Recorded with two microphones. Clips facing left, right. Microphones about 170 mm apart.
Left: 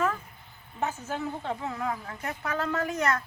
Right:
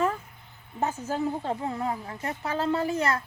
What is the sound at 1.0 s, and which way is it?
A woman's voice, 35° right (ahead or behind).